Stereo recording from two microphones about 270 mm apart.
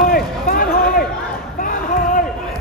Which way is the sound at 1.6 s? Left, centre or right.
Left.